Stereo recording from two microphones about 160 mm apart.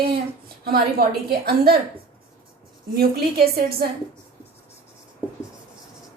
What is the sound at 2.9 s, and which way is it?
Speech, 75° right (ahead or behind).